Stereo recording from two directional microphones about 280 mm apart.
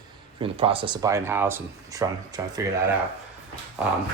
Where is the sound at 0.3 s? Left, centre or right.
Centre.